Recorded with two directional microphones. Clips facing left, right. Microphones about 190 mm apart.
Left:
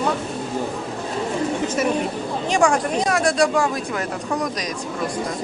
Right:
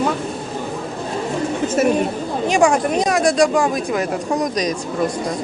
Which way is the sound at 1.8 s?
50° right (ahead or behind).